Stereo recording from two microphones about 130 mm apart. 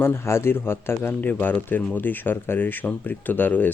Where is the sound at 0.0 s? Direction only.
20° left (ahead or behind).